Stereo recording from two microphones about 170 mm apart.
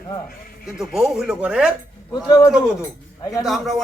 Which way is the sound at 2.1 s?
25° left (ahead or behind).